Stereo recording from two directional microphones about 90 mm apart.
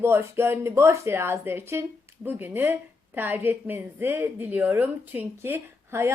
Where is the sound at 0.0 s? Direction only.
30° right (ahead or behind).